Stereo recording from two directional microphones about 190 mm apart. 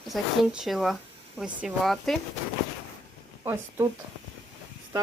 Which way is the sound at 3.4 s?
15° right (ahead or behind).